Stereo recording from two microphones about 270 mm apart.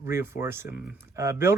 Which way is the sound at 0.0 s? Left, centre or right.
Centre.